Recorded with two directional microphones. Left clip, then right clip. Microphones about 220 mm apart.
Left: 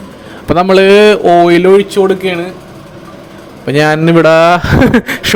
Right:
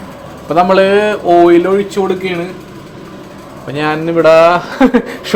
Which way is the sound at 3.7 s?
50° left (ahead or behind).